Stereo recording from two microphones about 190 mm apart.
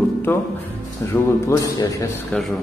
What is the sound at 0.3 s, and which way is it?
Speech, 10° left (ahead or behind).